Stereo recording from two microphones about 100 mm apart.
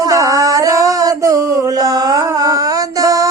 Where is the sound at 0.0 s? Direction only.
35° right (ahead or behind).